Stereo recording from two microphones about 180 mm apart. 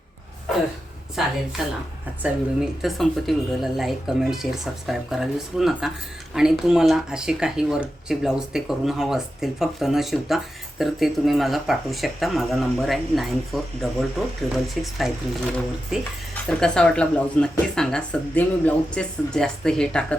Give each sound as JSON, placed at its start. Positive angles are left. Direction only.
{"t": 1.2, "sound": "speech", "side_deg": 0}
{"t": 16.6, "sound": "speech", "side_deg": 5}